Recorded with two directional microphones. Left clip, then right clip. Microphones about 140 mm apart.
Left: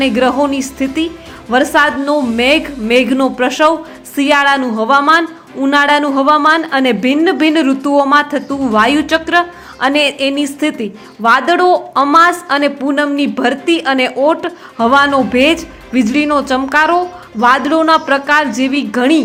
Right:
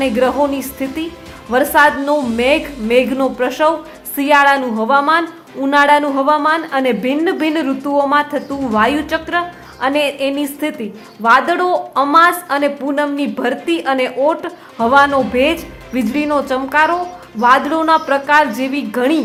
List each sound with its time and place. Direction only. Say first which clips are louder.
0.0 s a woman's voice: left 2 dB; 20° left (ahead or behind)